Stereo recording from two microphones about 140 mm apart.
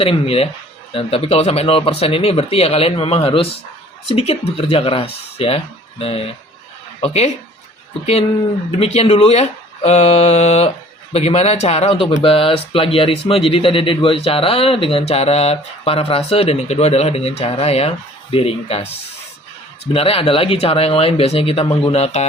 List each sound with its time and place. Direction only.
0.0 s speech: 45° left (ahead or behind)
8.8 s speech: 45° left (ahead or behind)
19.8 s speech: 45° left (ahead or behind)